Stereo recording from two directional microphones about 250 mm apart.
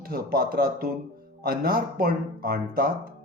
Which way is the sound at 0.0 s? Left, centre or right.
Right.